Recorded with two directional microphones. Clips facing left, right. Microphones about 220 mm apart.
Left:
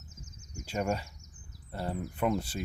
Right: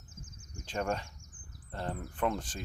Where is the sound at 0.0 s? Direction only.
55° right (ahead or behind).